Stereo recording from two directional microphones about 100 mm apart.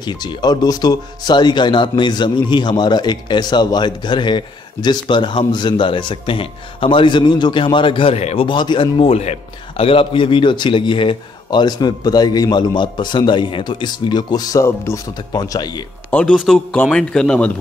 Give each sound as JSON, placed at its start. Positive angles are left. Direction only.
{"t": 0.0, "sound": "speech", "side_deg": 45}
{"t": 8.5, "sound": "speech", "side_deg": 55}
{"t": 9.8, "sound": "speech", "side_deg": 65}
{"t": 16.1, "sound": "speech", "side_deg": 15}
{"t": 16.3, "sound": "a man's voice", "side_deg": 0}